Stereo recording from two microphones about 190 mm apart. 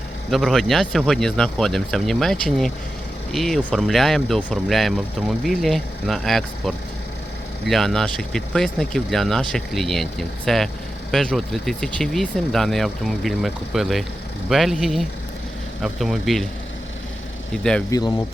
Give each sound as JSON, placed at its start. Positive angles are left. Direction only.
{"t": 0.3, "sound": "speech", "side_deg": 0}
{"t": 17.5, "sound": "speech", "side_deg": 5}